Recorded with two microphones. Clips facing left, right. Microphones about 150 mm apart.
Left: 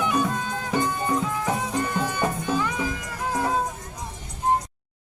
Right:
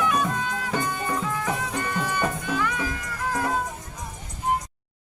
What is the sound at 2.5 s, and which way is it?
Music, 35° left (ahead or behind).